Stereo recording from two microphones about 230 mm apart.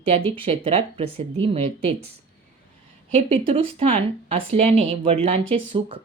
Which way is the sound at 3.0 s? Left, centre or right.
Right.